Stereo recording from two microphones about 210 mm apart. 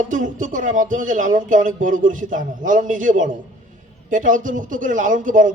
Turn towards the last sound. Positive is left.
turn(degrees=-40)  # may be behind; listen again after turning